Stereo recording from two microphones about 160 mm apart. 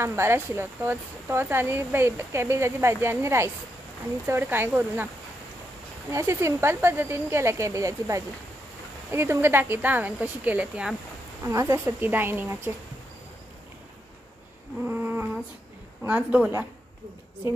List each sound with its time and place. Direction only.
0.0 s speech: 15° right (ahead or behind)
6.1 s speech: 15° right (ahead or behind)
14.9 s a sound: 15° right (ahead or behind)
16.0 s speech: 10° right (ahead or behind)